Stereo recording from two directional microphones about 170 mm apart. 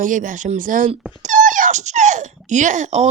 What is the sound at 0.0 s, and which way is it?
Speech, 50° right (ahead or behind).